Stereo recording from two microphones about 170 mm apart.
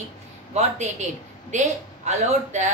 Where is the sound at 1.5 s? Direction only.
45° right (ahead or behind).